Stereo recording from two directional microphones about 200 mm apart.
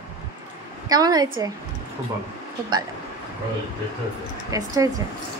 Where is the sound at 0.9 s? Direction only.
20° right (ahead or behind).